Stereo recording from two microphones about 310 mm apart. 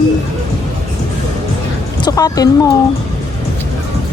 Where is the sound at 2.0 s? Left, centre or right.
Centre.